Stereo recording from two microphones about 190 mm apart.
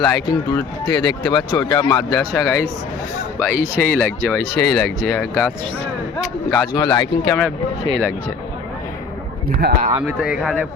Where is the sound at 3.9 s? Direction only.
10° left (ahead or behind).